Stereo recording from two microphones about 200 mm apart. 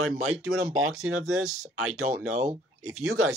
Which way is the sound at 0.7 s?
90° right.